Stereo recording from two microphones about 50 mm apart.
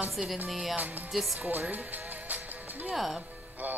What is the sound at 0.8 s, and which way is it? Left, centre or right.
Speech, right.